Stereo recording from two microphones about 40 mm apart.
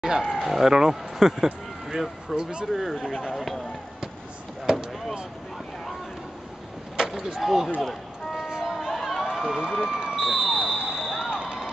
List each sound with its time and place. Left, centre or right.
0.0 s speech: centre
0.4 s speech: centre
7.1 s vehicle: centre
7.4 s speech: centre
7.8 s a sound: centre
11.2 s a sound: right